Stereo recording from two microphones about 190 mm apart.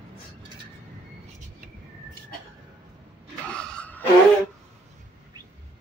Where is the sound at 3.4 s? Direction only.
5° left (ahead or behind).